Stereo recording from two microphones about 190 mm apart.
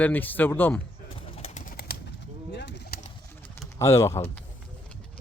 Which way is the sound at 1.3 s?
35° left (ahead or behind).